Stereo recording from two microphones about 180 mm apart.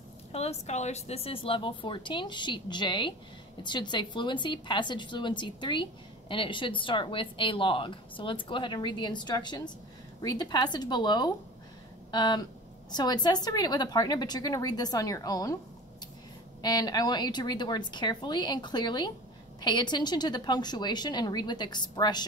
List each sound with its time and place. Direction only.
0.3 s a woman's voice: 35° left (ahead or behind); by 15.5 s 20° left (ahead or behind)
16.6 s a woman's voice: 20° left (ahead or behind)